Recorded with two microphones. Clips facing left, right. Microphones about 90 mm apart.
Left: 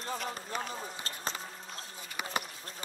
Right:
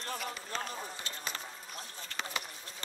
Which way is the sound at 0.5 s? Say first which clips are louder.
Even; 5° left (ahead or behind).